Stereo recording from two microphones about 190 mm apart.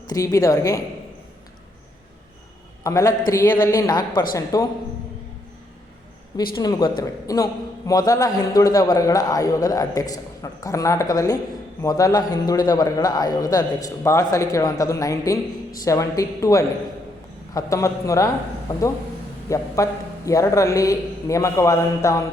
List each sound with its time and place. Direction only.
0.1 s a man's voice: 20° left (ahead or behind)
2.8 s a man's voice: 15° left (ahead or behind)
6.6 s a man's voice: 20° left (ahead or behind)